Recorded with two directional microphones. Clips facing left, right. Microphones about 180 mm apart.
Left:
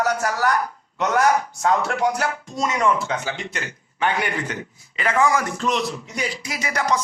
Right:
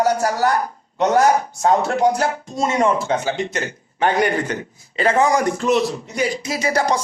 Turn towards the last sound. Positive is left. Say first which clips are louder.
# right 4 dB
turn(degrees=-30)  # may be behind; listen again after turning